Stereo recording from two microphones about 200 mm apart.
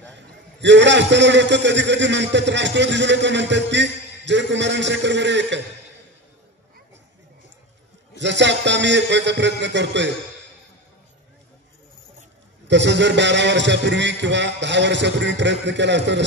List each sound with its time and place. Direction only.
0.0 s a man's voice: 60° right (ahead or behind)
8.2 s a man's voice: 60° right (ahead or behind)
12.6 s a man's voice: 65° right (ahead or behind)